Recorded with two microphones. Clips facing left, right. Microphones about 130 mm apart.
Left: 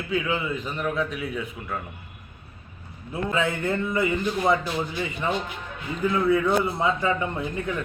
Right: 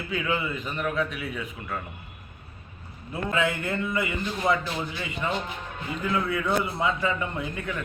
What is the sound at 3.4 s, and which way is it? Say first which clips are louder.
Speech: left 1 dB; 35° left (ahead or behind).